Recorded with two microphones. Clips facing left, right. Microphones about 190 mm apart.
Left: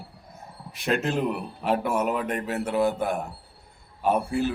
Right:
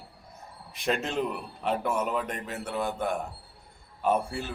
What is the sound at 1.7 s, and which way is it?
A man's voice, 65° left (ahead or behind).